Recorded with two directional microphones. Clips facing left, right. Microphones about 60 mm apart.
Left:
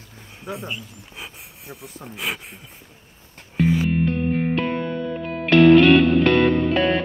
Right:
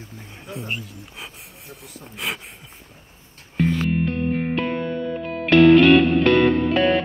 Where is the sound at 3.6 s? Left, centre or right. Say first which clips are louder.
Left 1 dB; centre.